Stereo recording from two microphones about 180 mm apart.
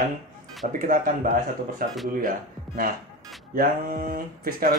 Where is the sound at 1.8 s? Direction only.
55° right (ahead or behind).